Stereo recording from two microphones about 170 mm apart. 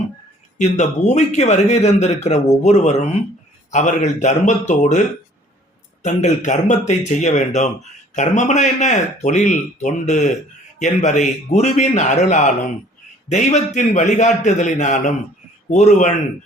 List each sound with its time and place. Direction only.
0.6 s a man's voice: 40° left (ahead or behind)